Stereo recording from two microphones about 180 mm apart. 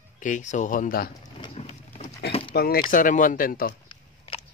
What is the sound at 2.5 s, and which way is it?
Speech, 60° left (ahead or behind).